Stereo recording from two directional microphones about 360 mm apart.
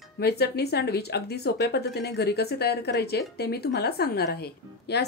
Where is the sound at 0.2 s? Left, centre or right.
Left.